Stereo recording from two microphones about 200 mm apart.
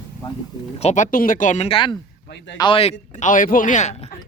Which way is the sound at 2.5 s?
25° left (ahead or behind).